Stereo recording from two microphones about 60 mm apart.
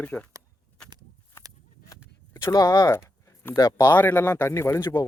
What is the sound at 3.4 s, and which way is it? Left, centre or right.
Speech, left.